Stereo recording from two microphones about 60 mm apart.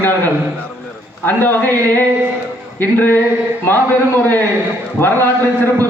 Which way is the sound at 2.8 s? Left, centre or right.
Left.